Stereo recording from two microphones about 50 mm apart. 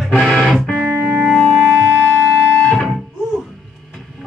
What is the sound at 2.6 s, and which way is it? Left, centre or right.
Music, centre.